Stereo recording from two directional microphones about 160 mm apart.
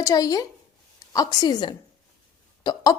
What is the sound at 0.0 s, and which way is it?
A woman's voice, 20° left (ahead or behind).